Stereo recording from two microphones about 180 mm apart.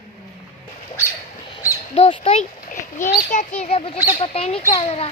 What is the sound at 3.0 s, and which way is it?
Speech, 15° left (ahead or behind).